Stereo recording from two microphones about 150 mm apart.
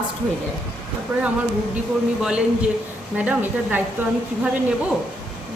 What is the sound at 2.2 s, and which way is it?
A man's voice, 5° right (ahead or behind).